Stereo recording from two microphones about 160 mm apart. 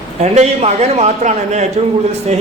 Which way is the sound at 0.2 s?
45° right (ahead or behind).